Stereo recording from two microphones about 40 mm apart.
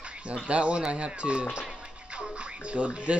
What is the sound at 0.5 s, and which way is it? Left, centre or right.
Speech, right.